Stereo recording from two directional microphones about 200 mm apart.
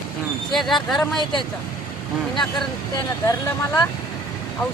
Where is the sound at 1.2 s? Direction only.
25° left (ahead or behind).